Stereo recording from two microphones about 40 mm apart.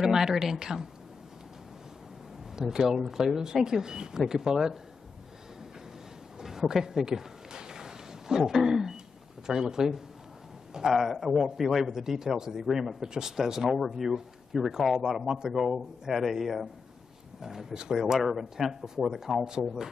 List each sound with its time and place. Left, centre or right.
0.0 s speech: centre
2.5 s speech: centre
6.7 s a sound: centre
8.6 s speech: centre